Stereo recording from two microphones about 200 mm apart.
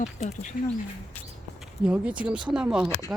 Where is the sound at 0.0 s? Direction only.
30° left (ahead or behind).